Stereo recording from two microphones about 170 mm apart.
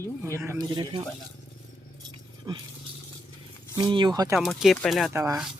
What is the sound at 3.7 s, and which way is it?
Speech, 25° right (ahead or behind).